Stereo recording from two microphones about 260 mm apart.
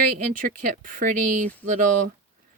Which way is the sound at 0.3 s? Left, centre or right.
Right.